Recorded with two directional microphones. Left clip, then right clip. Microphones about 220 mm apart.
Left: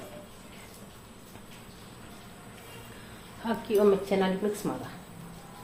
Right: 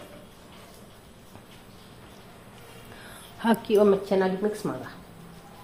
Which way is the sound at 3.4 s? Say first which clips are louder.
Right 6 dB; 40° right (ahead or behind).